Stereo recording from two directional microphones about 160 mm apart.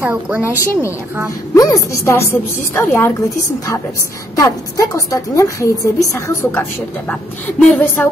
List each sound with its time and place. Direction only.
0.0 s a woman's voice: 10° right (ahead or behind)
1.5 s a woman's voice: 15° left (ahead or behind)